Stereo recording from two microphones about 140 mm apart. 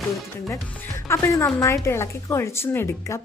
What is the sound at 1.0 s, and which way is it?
A woman's voice, 20° left (ahead or behind).